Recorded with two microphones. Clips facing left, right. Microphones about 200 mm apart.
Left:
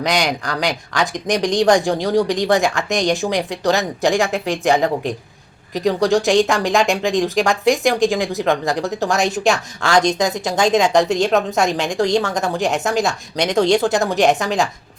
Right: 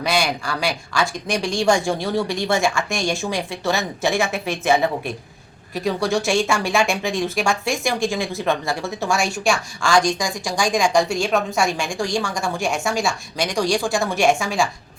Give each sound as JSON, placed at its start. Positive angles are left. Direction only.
{"t": 0.0, "sound": "a woman's voice", "side_deg": 20}